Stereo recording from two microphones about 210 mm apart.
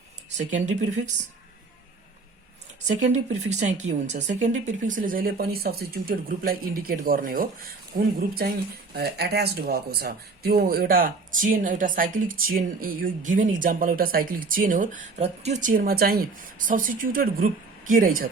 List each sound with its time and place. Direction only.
0.3 s speech: 35° right (ahead or behind)
2.8 s speech: 35° right (ahead or behind)